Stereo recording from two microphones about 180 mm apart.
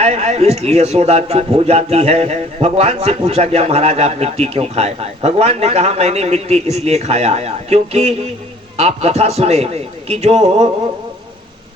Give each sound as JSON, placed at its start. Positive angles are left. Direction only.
{"t": 0.0, "sound": "a man's voice", "side_deg": -35}